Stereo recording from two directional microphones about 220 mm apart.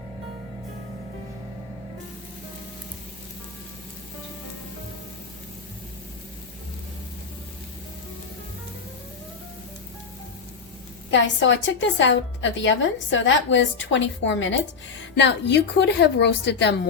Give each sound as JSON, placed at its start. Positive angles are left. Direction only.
{"t": 11.1, "sound": "a woman's voice", "side_deg": 55}